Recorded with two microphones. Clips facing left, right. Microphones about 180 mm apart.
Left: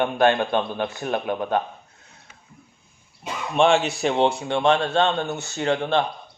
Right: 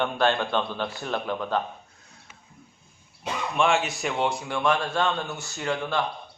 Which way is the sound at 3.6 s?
30° left (ahead or behind).